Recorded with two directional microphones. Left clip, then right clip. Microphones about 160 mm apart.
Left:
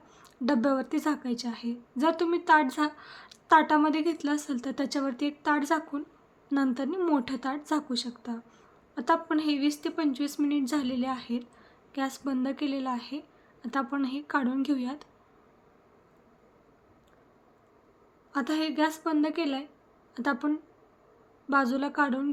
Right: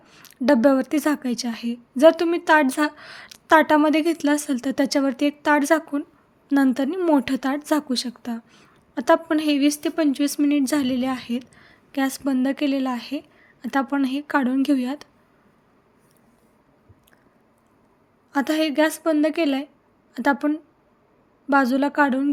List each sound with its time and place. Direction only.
0.1 s a woman's voice: 45° right (ahead or behind)
18.3 s a woman's voice: 45° right (ahead or behind)